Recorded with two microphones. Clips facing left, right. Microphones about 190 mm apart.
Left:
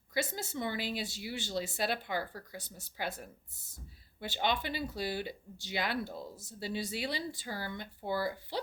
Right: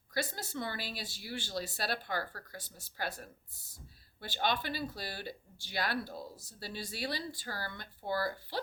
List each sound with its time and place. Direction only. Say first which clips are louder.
0.1 s speech: left 2 dB; 20° left (ahead or behind)